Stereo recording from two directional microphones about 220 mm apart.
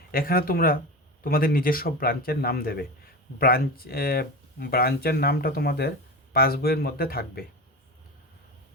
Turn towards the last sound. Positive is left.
turn(degrees=45)  # may be behind; listen again after turning